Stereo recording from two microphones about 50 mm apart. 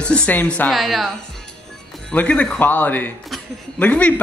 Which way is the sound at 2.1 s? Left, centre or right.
Left.